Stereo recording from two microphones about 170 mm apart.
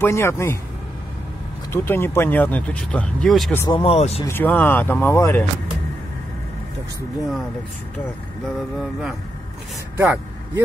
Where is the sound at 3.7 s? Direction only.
35° left (ahead or behind).